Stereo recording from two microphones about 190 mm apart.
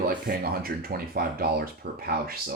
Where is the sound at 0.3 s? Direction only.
55° right (ahead or behind).